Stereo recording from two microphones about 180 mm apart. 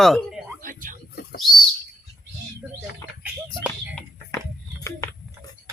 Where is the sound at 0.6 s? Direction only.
50° right (ahead or behind).